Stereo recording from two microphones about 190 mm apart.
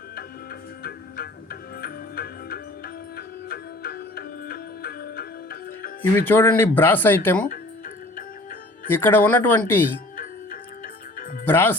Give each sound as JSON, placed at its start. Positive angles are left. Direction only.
{"t": 0.8, "sound": "music", "side_deg": 55}
{"t": 6.0, "sound": "speech", "side_deg": 10}
{"t": 8.9, "sound": "speech", "side_deg": 10}
{"t": 11.4, "sound": "speech", "side_deg": 10}